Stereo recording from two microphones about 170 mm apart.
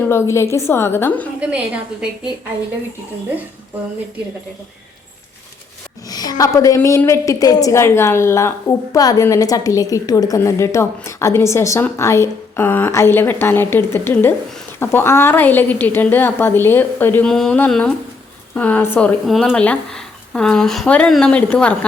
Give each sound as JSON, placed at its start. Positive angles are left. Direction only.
{"t": 0.0, "sound": "a woman's voice", "side_deg": 15}
{"t": 1.4, "sound": "a woman's voice", "side_deg": -5}
{"t": 6.1, "sound": "a woman's voice", "side_deg": 20}